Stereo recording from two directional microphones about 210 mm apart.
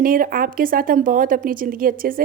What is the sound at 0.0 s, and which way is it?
Speech, 40° right (ahead or behind).